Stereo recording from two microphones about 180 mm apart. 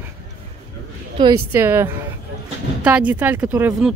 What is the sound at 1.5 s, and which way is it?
Speech, 15° right (ahead or behind).